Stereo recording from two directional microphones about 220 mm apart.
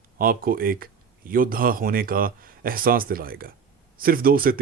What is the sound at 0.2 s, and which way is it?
Speech, 40° right (ahead or behind).